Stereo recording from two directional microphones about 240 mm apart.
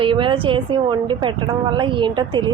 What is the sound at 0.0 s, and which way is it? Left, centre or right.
A woman's voice, right.